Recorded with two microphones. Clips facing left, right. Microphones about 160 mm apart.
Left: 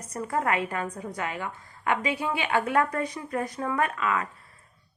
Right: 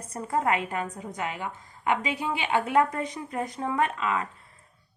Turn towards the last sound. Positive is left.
turn(degrees=-25)  # may be behind; listen again after turning